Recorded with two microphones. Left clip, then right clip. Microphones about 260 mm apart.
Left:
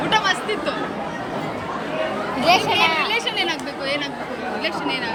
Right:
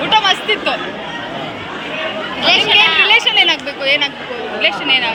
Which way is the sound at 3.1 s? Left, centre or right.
Centre.